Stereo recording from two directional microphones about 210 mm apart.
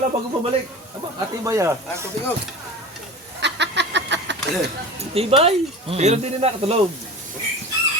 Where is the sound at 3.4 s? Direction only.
55° right (ahead or behind).